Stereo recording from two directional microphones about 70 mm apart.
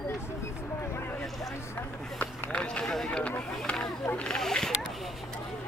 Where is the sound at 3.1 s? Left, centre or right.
Centre.